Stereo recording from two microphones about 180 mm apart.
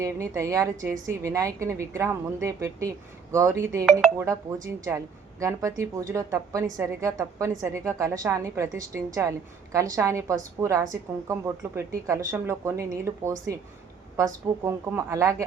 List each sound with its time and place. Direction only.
0.0 s speech: 15° right (ahead or behind)